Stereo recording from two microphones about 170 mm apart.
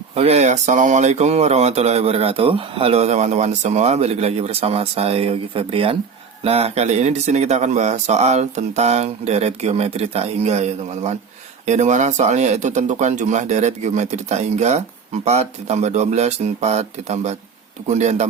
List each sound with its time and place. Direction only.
0.2 s speech: 40° right (ahead or behind)